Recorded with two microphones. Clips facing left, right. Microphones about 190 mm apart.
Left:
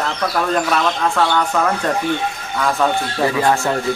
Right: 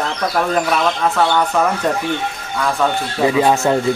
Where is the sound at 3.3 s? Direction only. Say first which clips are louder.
Right 4 dB; 20° right (ahead or behind).